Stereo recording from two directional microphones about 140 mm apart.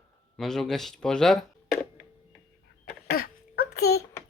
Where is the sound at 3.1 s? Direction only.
90° left.